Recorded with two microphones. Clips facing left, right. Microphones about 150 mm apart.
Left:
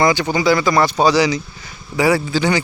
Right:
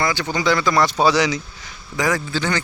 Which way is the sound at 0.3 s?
5° left (ahead or behind).